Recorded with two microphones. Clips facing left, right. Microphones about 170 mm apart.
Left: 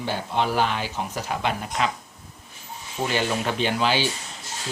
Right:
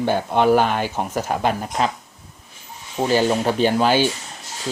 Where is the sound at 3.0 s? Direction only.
35° right (ahead or behind).